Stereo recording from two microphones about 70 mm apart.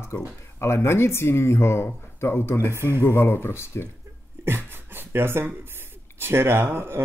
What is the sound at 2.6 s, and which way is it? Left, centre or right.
Speech, right.